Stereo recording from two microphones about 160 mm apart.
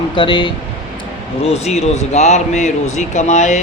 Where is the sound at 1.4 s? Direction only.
40° left (ahead or behind).